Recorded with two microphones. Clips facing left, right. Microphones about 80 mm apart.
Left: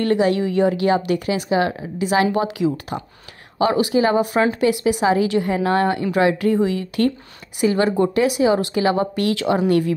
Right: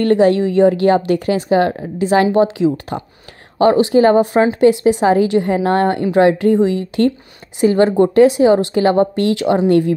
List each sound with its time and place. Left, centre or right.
0.0 s a woman's voice: right
2.3 s a woman's voice: right
3.5 s a woman's voice: right
4.4 s a woman's voice: right
6.1 s a woman's voice: right
7.6 s a woman's voice: right
9.1 s a woman's voice: right